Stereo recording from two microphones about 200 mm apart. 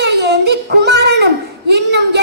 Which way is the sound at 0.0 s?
60° right (ahead or behind).